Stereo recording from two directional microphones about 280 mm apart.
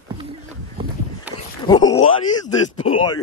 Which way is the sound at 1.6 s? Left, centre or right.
Centre.